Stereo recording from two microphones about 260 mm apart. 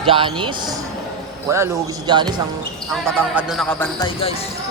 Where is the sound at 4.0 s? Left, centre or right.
Left.